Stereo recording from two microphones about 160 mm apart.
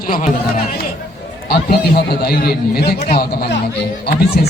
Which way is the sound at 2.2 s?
75° left (ahead or behind).